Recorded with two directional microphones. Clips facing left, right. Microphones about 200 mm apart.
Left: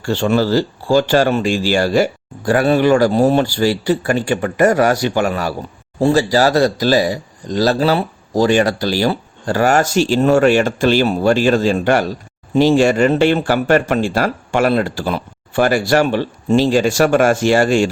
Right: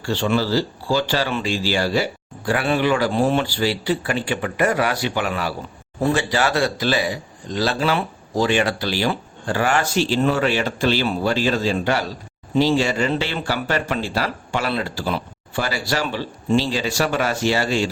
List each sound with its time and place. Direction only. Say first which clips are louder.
0.0 s speech: left 5 dB; 45° left (ahead or behind)
6.0 s speech: left 7 dB; 35° left (ahead or behind); by 17.9 s 50° left (ahead or behind)